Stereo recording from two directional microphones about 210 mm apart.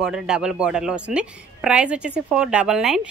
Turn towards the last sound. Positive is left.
turn(degrees=-5)  # may be behind; listen again after turning